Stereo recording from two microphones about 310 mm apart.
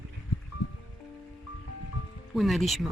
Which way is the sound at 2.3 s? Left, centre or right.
Centre.